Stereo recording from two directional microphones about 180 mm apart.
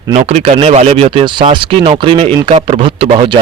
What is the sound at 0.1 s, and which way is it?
A man's voice, 35° right (ahead or behind).